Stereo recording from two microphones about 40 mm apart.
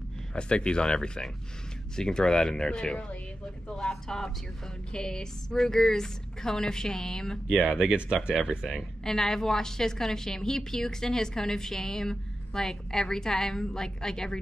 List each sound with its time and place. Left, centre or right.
0.3 s a woman's voice: left
7.4 s speech: right
9.0 s a woman's voice: centre